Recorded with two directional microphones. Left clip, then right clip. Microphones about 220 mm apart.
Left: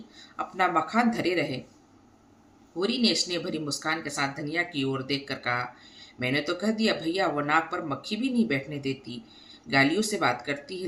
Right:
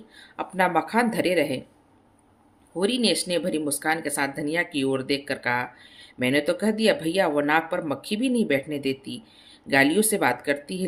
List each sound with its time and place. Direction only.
0.3 s speech: 45° right (ahead or behind)
2.7 s speech: 45° right (ahead or behind)